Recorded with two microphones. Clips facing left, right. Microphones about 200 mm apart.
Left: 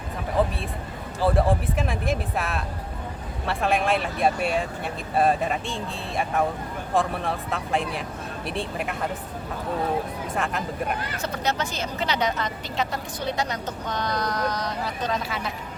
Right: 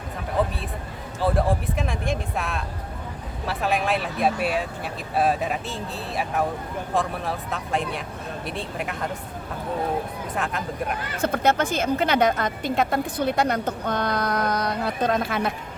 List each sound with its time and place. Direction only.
1.2 s speech: centre (ahead or behind)
10.3 s speech: centre (ahead or behind)
11.2 s a woman's voice: 55° right (ahead or behind)